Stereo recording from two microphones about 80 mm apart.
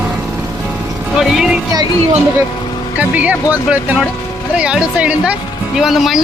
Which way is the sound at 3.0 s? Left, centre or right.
Centre.